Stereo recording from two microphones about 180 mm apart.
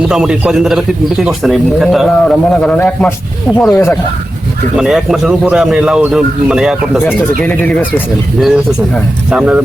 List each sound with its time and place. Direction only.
0.1 s a man's voice: 5° right (ahead or behind); by 3.9 s 15° left (ahead or behind)
4.8 s a man's voice: centre (ahead or behind)
7.2 s speech: 10° left (ahead or behind)
8.4 s a man's voice: centre (ahead or behind)